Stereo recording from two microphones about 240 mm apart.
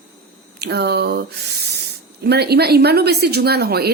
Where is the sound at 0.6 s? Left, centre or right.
Right.